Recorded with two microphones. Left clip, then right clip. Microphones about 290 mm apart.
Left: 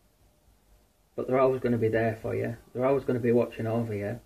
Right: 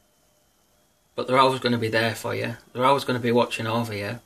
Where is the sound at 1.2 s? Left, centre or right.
Centre.